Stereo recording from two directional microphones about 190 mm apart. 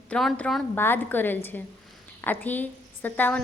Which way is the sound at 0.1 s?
5° left (ahead or behind).